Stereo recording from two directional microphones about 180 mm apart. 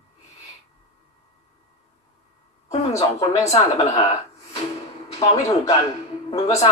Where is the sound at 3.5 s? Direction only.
35° left (ahead or behind).